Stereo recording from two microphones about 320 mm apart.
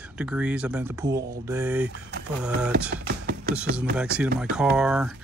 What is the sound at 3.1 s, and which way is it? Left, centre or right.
Music, right.